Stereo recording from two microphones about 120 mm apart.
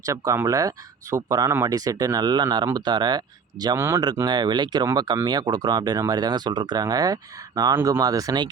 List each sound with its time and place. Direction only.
0.0 s speech: 25° right (ahead or behind)
3.8 s speech: 20° right (ahead or behind)
4.2 s speech: 35° right (ahead or behind)